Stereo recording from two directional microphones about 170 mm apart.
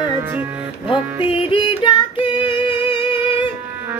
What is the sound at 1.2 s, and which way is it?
Yodeling, 30° left (ahead or behind).